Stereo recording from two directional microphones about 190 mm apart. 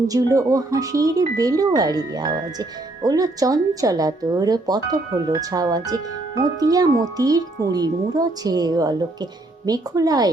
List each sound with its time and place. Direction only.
0.1 s speech: 20° right (ahead or behind)